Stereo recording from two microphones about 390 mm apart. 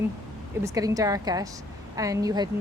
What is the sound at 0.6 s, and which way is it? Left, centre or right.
A woman's voice, centre.